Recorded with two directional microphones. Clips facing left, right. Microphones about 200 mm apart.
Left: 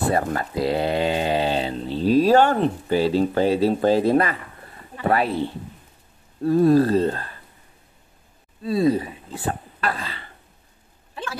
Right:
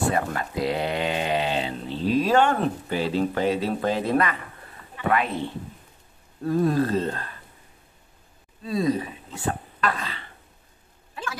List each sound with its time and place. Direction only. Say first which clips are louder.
0.0 s speech: left 3 dB; 35° left (ahead or behind)
6.4 s speech: left 6 dB; 35° left (ahead or behind)
8.6 s speech: left 4 dB; 30° left (ahead or behind)